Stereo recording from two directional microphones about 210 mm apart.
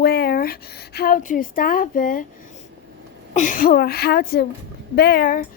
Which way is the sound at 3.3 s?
40° left (ahead or behind).